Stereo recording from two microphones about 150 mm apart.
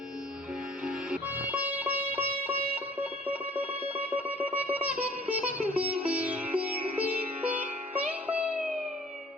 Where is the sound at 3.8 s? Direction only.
40° right (ahead or behind).